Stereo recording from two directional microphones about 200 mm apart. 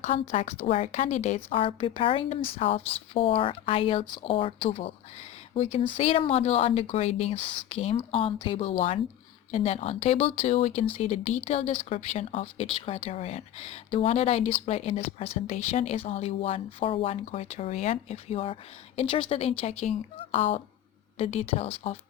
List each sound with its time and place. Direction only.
0.0 s a woman's voice: 35° left (ahead or behind)